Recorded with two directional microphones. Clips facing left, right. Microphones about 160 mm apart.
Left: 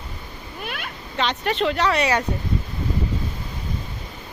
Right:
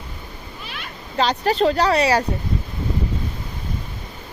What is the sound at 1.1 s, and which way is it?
Speech, 35° right (ahead or behind).